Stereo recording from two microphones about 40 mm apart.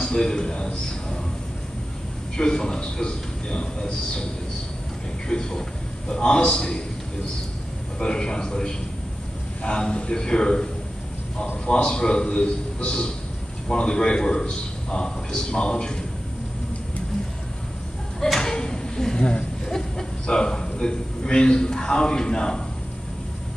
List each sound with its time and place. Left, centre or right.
0.0 s a man's voice: centre
2.3 s a man's voice: centre
5.3 s a man's voice: centre
8.0 s a man's voice: left
18.2 s a sound: centre
19.1 s a sound: left
19.7 s a man's voice: centre